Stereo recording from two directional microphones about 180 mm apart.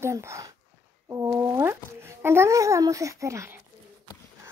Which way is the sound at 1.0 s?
15° right (ahead or behind).